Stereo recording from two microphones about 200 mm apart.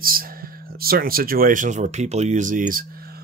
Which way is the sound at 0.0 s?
45° right (ahead or behind).